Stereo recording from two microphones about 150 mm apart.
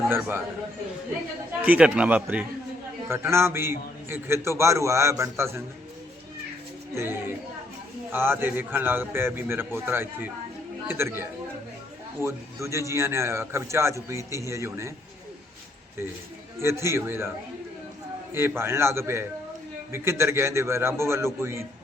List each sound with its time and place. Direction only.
0.1 s a man's voice: 15° right (ahead or behind)
1.6 s a man's voice: 10° right (ahead or behind)
6.9 s a man's voice: 15° right (ahead or behind)
16.6 s a man's voice: 15° right (ahead or behind)
18.3 s a man's voice: 15° right (ahead or behind)